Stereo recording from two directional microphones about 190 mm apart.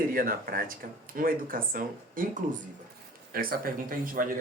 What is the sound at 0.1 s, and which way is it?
Speech, 50° right (ahead or behind).